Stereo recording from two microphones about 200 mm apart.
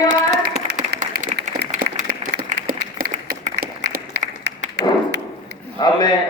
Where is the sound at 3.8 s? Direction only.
55° right (ahead or behind).